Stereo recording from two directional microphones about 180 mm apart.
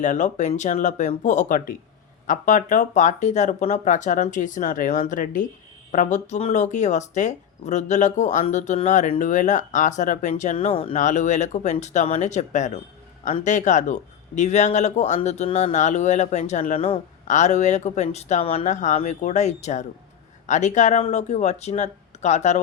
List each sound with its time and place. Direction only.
0.0 s speech: 45° left (ahead or behind)